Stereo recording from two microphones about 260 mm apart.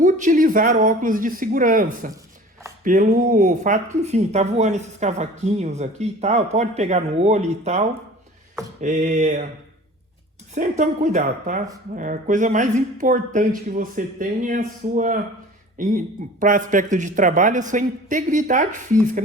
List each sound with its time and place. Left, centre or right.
0.0 s speech: right
10.5 s speech: right